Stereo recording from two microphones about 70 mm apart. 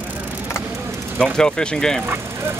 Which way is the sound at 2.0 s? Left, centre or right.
Right.